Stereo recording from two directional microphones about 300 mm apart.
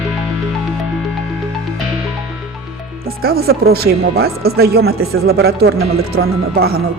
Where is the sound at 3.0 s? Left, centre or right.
Right.